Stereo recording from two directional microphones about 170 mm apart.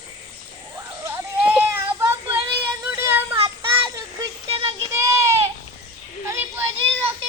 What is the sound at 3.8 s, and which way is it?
Child singing, 25° right (ahead or behind).